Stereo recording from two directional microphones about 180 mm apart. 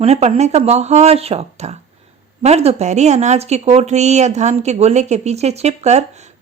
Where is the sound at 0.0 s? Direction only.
35° right (ahead or behind).